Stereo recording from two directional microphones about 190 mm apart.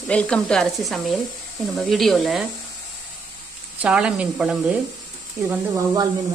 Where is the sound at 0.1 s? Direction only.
5° left (ahead or behind).